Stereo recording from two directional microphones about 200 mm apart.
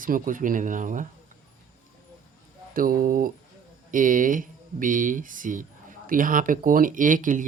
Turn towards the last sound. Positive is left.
turn(degrees=-40)  # may be behind; listen again after turning